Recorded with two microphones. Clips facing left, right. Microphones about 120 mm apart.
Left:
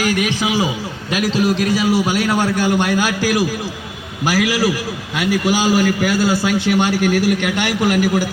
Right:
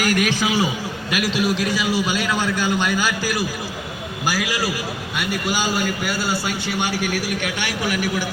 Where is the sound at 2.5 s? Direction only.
65° left (ahead or behind).